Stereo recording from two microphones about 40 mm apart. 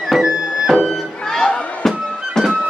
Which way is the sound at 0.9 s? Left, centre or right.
Centre.